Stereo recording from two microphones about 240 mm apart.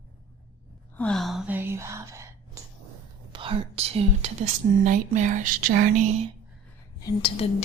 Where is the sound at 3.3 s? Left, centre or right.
Right.